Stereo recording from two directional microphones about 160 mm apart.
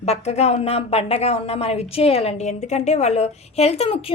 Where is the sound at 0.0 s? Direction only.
40° left (ahead or behind).